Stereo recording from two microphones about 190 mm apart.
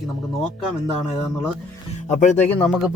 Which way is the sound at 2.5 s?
10° left (ahead or behind).